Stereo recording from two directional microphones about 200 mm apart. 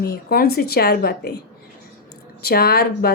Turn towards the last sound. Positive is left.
turn(degrees=50)  # may be behind; listen again after turning